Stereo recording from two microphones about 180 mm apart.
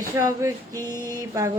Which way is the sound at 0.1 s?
15° right (ahead or behind).